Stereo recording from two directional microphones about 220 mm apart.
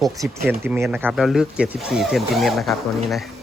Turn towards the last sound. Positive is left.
turn(degrees=0)  # may be behind; listen again after turning